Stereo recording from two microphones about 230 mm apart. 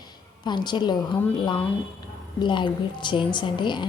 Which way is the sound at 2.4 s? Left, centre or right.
Centre.